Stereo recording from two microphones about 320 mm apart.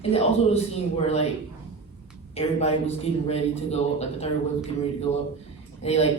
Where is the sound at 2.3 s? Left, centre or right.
Centre.